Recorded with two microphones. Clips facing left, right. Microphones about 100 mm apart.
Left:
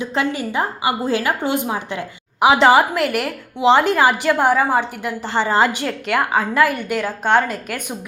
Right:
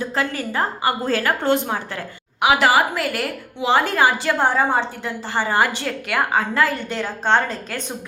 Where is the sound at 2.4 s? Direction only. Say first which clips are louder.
Left 4 dB; 30° left (ahead or behind).